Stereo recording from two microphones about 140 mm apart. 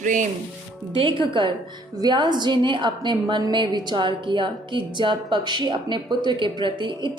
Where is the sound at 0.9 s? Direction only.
35° right (ahead or behind).